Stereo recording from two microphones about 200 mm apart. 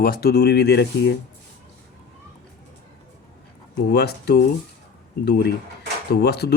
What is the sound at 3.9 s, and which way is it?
Speech, 55° left (ahead or behind).